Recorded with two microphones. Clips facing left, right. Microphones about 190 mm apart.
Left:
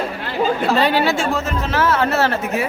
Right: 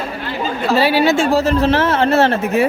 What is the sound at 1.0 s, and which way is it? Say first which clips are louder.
Speech: right 6 dB; 25° right (ahead or behind).